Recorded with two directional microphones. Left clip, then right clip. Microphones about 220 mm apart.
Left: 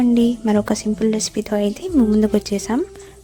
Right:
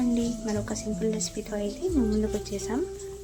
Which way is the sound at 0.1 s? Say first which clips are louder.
Left 12 dB; 40° left (ahead or behind).